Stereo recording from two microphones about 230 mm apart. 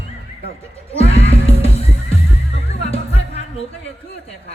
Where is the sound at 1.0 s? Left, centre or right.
Left.